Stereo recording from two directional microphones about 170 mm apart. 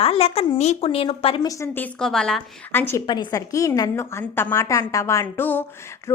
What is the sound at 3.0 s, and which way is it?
A woman's voice, 25° left (ahead or behind).